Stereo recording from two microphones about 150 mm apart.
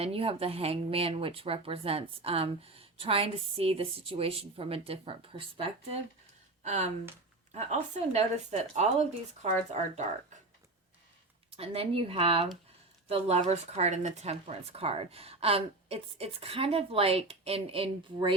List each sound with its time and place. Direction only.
0.0 s speech: 40° right (ahead or behind)
6.7 s a woman's voice: 50° right (ahead or behind)
11.5 s speech: 40° right (ahead or behind)